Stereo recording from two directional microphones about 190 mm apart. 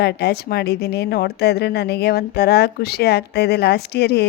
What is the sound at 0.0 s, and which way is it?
A woman's voice, 60° left (ahead or behind).